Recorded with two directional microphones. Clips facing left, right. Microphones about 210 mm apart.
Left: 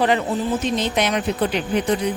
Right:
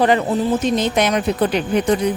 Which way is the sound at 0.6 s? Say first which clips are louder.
Right 4 dB; 45° right (ahead or behind).